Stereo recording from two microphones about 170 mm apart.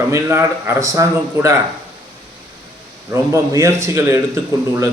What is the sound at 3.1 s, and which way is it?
Speech, 15° right (ahead or behind).